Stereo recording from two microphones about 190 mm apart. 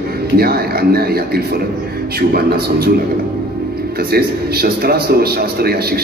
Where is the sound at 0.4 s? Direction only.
55° right (ahead or behind).